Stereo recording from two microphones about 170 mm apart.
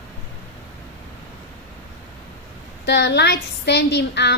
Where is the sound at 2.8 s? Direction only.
85° left.